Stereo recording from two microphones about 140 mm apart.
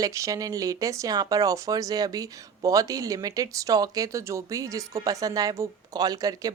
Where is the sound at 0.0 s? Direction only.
25° right (ahead or behind).